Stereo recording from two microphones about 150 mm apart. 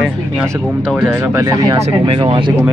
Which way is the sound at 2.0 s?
35° right (ahead or behind).